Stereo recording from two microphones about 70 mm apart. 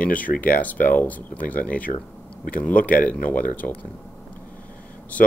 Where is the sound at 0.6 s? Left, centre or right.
Left.